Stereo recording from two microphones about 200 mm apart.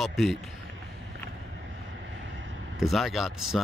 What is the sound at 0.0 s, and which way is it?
Speech, centre (ahead or behind).